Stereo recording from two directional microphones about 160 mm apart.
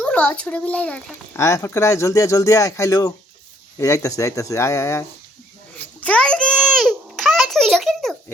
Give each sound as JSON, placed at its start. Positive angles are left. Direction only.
{"t": 0.0, "sound": "speech", "side_deg": 5}
{"t": 6.0, "sound": "a child's voice", "side_deg": 5}